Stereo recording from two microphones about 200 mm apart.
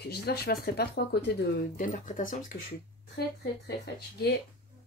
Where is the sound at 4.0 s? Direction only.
50° left (ahead or behind).